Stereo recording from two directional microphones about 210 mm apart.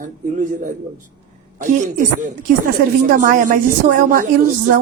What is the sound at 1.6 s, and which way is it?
Speech, 40° right (ahead or behind).